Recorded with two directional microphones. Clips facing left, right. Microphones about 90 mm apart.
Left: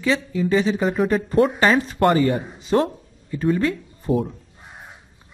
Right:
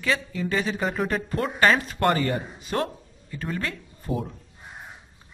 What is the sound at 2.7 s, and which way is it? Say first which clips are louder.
Speech: left 8 dB; 20° left (ahead or behind).